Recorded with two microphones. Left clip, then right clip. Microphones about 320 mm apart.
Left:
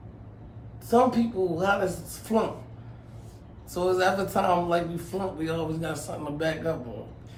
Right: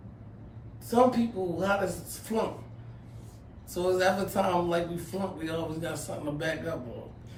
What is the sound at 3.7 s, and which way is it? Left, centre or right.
Speech, centre.